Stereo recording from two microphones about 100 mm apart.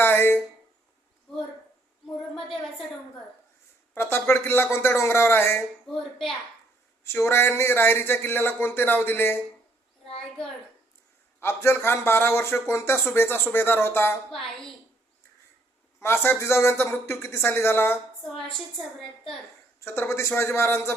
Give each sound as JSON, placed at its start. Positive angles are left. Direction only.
{"t": 0.0, "sound": "a sound", "side_deg": 20}
{"t": 2.3, "sound": "a woman's voice", "side_deg": 5}
{"t": 3.9, "sound": "a man's voice", "side_deg": 25}
{"t": 5.9, "sound": "a woman's voice", "side_deg": 5}
{"t": 7.0, "sound": "a man's voice", "side_deg": 25}
{"t": 11.3, "sound": "a man's voice", "side_deg": 25}
{"t": 14.3, "sound": "a woman's voice", "side_deg": 5}
{"t": 16.0, "sound": "a man's voice", "side_deg": 25}
{"t": 19.8, "sound": "a man's voice", "side_deg": 25}